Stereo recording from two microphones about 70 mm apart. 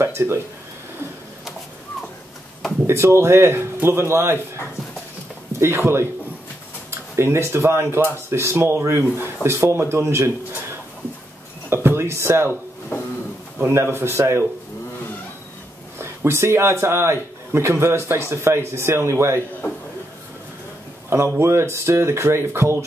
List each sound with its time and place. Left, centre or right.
0.0 s speech: right
2.9 s speech: right
5.5 s speech: right
11.7 s speech: right
13.6 s speech: right
16.0 s a man's voice: right
21.4 s speech: right